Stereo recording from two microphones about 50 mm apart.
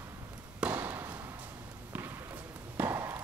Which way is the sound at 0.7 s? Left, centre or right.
Right.